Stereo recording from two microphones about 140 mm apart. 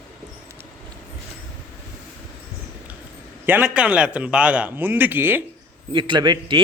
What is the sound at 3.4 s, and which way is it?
A man's voice, 10° right (ahead or behind).